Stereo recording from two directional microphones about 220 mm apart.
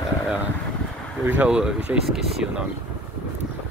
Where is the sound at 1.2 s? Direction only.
5° right (ahead or behind).